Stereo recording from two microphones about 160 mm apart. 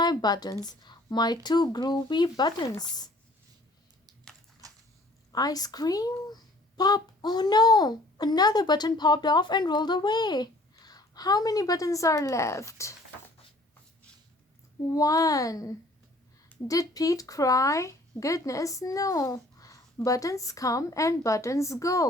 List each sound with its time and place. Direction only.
0.0 s speech: 25° left (ahead or behind)
4.6 s a sound: 20° right (ahead or behind)
5.3 s speech: 25° left (ahead or behind)
14.9 s speech: 20° left (ahead or behind)